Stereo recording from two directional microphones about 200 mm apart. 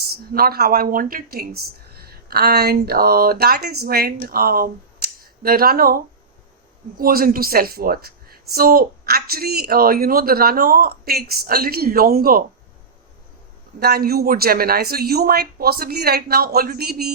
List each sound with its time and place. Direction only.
0.3 s speech: 50° right (ahead or behind)
7.0 s speech: 45° right (ahead or behind)
13.7 s speech: 50° right (ahead or behind)